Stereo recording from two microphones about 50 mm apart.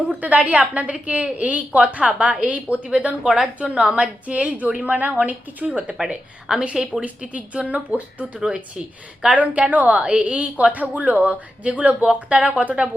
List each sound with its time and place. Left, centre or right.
0.2 s a woman's voice: right
6.5 s a woman's voice: centre
7.0 s a woman's voice: right
10.0 s a woman's voice: centre
10.3 s a woman's voice: right